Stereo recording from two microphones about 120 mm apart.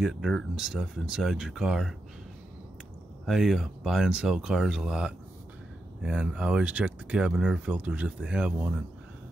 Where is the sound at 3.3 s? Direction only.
Centre (ahead or behind).